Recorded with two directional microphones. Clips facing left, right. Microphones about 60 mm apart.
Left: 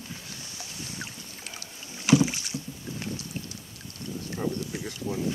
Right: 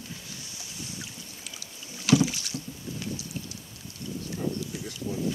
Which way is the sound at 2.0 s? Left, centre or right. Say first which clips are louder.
Left 1 dB; left.